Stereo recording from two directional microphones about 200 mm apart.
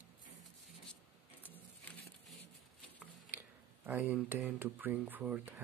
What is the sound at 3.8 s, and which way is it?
Speech, 10° right (ahead or behind).